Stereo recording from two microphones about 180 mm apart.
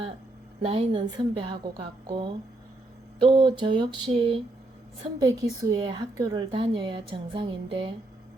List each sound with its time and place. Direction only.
0.6 s a woman's voice: 30° right (ahead or behind)
5.2 s a woman's voice: 20° right (ahead or behind)